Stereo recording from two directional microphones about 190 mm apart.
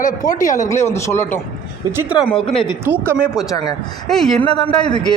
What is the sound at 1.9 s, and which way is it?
Speech, 5° right (ahead or behind).